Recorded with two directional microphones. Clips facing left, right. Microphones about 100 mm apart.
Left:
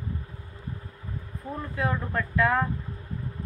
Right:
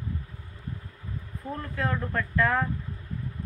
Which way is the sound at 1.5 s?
10° left (ahead or behind).